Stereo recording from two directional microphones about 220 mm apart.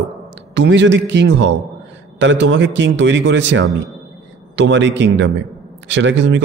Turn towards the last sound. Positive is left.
turn(degrees=-55)  # may be behind; listen again after turning